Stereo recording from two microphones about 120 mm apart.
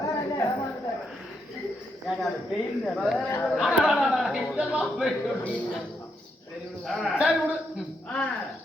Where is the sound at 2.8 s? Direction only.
10° left (ahead or behind).